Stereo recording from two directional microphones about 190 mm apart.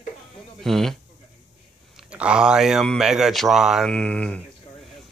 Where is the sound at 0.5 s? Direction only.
Centre (ahead or behind).